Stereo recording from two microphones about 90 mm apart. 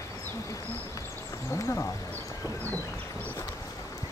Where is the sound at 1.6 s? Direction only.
30° left (ahead or behind).